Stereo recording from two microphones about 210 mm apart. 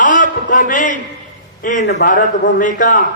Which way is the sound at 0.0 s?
40° left (ahead or behind).